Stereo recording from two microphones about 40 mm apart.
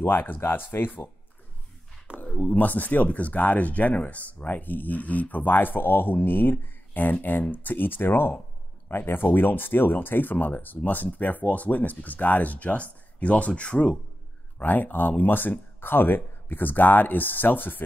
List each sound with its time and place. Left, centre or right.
0.0 s speech: left
0.4 s speech: left
2.2 s a sound: left
2.5 s speech: left
10.8 s speech: left
14.6 s speech: left